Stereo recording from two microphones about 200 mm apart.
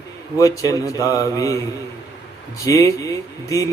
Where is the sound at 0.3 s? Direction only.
15° left (ahead or behind).